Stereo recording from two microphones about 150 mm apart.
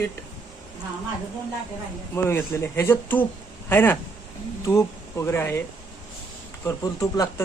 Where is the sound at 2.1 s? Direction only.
15° left (ahead or behind).